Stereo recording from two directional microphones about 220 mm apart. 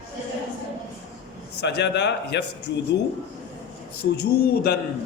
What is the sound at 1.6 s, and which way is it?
Speech, 50° left (ahead or behind).